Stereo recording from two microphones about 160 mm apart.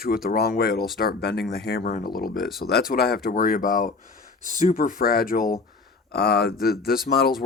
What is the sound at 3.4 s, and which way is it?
Speech, 60° left (ahead or behind).